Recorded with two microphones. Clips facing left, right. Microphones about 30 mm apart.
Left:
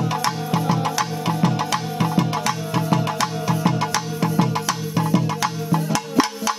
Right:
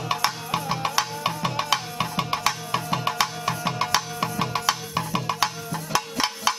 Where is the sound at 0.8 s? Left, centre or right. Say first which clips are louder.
Left 3 dB; centre.